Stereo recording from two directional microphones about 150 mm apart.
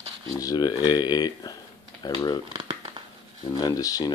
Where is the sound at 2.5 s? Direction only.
30° right (ahead or behind).